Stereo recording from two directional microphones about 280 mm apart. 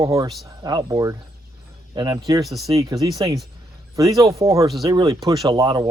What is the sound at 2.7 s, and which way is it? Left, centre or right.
Speech, centre.